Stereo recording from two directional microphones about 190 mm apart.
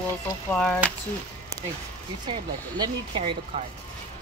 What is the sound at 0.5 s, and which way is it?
Speech, 5° left (ahead or behind).